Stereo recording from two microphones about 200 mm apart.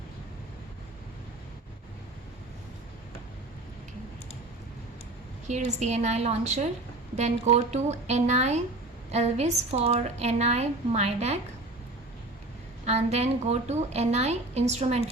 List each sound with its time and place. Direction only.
5.5 s a woman's voice: 35° right (ahead or behind)
12.8 s a woman's voice: 35° right (ahead or behind)